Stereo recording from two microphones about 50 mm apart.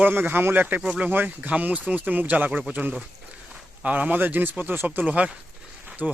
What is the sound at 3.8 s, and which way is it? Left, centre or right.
Speech, right.